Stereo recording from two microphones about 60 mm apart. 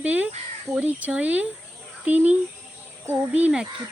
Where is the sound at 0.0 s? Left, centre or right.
Right.